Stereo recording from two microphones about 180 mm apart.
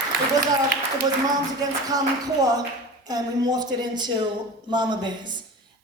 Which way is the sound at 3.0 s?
20° right (ahead or behind).